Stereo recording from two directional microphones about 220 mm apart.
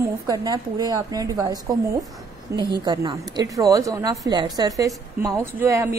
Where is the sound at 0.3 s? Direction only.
15° right (ahead or behind).